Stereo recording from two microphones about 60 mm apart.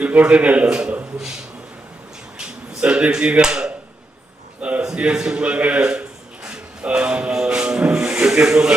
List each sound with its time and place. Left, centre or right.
0.0 s a man's voice: right
2.4 s speech: centre
4.6 s a sound: centre